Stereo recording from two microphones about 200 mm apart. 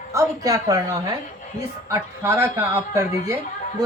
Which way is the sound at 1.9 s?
15° right (ahead or behind).